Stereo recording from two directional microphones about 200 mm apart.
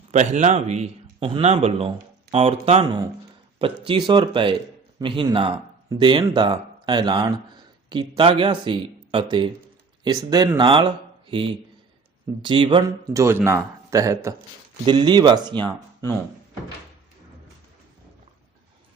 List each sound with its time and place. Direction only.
0.1 s speech: 35° right (ahead or behind)
3.6 s speech: 25° right (ahead or behind)
13.2 s speech: 10° right (ahead or behind)